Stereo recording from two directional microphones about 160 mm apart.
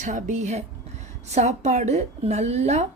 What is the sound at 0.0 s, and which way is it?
A woman's voice, 50° right (ahead or behind).